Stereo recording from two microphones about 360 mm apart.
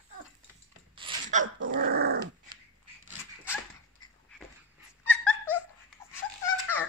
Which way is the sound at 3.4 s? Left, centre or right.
Centre.